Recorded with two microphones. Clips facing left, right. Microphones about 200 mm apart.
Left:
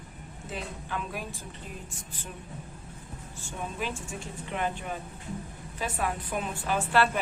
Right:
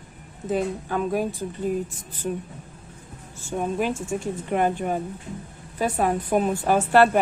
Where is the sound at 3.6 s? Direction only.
50° right (ahead or behind).